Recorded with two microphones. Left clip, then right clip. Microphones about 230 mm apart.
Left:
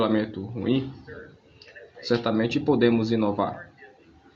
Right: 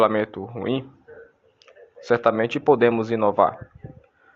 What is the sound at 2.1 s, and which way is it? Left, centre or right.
Speech, right.